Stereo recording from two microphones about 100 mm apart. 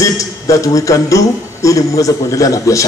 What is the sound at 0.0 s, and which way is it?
A man's voice, 35° left (ahead or behind).